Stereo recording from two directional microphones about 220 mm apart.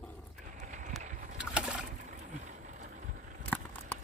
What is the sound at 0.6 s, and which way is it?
Run, 35° right (ahead or behind).